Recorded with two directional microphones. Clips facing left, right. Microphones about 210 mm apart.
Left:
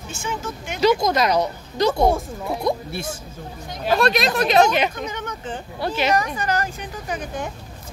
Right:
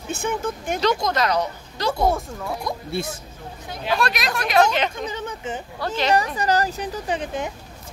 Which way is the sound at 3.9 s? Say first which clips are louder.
Left 6 dB; 25° left (ahead or behind).